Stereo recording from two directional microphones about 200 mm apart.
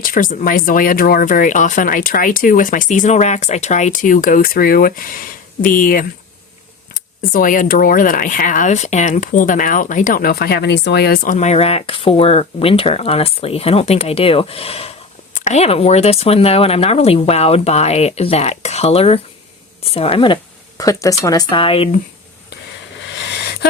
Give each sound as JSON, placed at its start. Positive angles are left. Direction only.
{"t": 0.0, "sound": "speech", "side_deg": 45}
{"t": 7.2, "sound": "speech", "side_deg": 45}
{"t": 23.0, "sound": "a sound", "side_deg": 60}